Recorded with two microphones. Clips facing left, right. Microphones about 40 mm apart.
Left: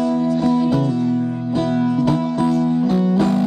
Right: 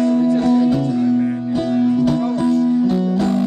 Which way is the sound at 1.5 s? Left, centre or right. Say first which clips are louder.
Left 1 dB; centre.